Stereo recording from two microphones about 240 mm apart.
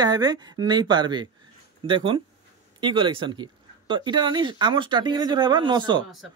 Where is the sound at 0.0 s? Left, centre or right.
Centre.